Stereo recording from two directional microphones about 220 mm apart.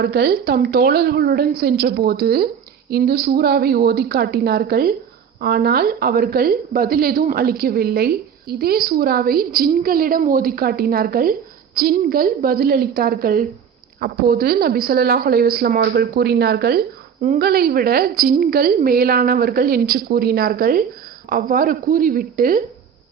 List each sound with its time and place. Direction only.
0.0 s a woman's voice: 45° right (ahead or behind)